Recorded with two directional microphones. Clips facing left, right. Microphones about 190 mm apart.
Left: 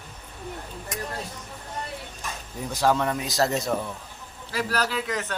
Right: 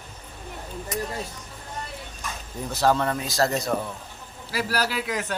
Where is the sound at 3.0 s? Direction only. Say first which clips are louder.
Even; 10° left (ahead or behind).